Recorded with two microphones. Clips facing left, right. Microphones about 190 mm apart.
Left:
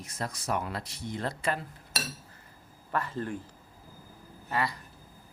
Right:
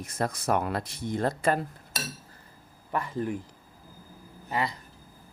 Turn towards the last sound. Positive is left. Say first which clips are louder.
# right 1 dB
turn(degrees=-20)  # may be behind; listen again after turning